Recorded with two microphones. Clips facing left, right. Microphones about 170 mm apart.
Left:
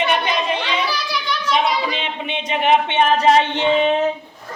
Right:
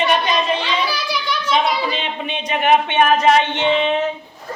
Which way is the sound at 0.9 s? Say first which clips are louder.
Right 1 dB; centre (ahead or behind).